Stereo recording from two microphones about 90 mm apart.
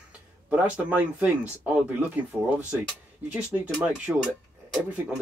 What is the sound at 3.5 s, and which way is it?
Speech, 15° right (ahead or behind).